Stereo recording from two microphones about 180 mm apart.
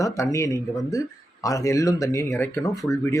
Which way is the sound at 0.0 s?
15° left (ahead or behind).